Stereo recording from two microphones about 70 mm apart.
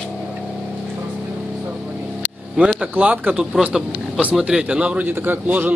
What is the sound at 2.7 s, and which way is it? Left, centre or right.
A man's voice, centre.